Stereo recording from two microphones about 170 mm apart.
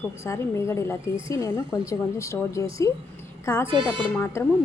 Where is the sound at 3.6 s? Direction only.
30° right (ahead or behind).